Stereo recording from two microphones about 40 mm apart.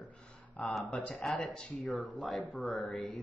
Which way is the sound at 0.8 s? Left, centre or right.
Left.